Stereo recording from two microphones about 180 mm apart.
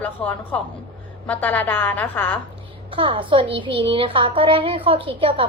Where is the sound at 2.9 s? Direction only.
30° right (ahead or behind).